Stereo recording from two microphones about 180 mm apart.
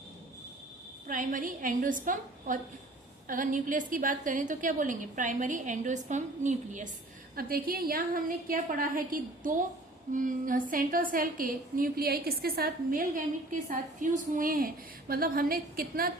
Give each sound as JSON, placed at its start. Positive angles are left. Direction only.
{"t": 1.0, "sound": "a woman's voice", "side_deg": -45}
{"t": 7.3, "sound": "a woman's voice", "side_deg": -55}